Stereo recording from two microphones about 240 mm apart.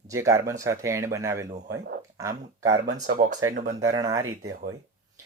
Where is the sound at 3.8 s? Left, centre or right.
Centre.